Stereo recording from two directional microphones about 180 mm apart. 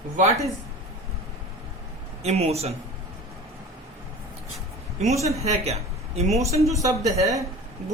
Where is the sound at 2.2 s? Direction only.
35° right (ahead or behind).